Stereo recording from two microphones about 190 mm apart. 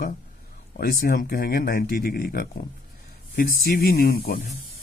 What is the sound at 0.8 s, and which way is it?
Speech, 50° left (ahead or behind).